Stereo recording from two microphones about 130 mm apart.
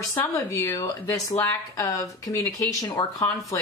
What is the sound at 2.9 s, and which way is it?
Speech, 35° left (ahead or behind).